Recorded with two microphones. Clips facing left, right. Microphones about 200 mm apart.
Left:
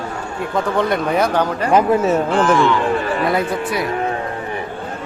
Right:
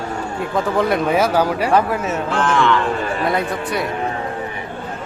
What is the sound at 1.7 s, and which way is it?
Speech, 20° left (ahead or behind).